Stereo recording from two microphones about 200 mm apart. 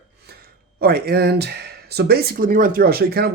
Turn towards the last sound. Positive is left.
turn(degrees=-50)  # may be behind; listen again after turning